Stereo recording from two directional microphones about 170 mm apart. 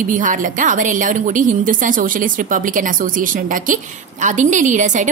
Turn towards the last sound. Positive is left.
turn(degrees=-45)  # may be behind; listen again after turning